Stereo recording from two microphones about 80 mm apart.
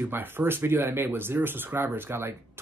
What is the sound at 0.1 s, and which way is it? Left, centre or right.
Speech, right.